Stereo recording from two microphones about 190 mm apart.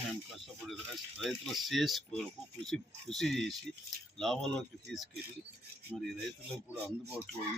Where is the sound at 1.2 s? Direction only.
Centre (ahead or behind).